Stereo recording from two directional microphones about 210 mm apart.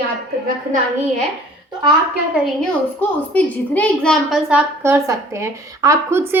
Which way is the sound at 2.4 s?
5° left (ahead or behind).